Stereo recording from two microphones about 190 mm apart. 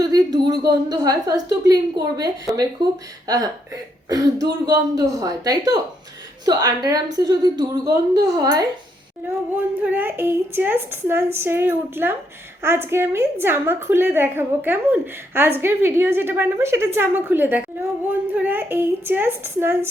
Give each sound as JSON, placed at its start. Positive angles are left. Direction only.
{"t": 0.0, "sound": "a sound", "side_deg": -20}
{"t": 0.6, "sound": "a woman's voice", "side_deg": -20}
{"t": 9.2, "sound": "speech", "side_deg": -10}